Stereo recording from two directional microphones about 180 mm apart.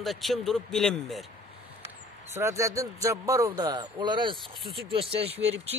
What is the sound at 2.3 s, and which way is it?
A man's voice, 15° right (ahead or behind).